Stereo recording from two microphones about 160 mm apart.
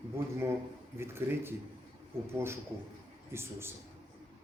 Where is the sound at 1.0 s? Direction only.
15° right (ahead or behind).